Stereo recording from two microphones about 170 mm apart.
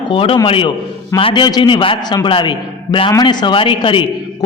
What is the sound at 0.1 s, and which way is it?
A man's voice, 30° left (ahead or behind).